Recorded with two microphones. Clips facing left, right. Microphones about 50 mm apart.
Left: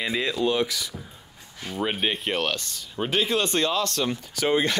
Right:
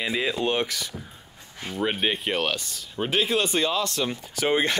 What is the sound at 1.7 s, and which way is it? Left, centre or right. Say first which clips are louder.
Speech: right 1 dB; centre.